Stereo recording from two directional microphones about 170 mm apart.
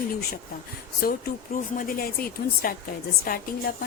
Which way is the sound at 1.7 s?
55° left (ahead or behind).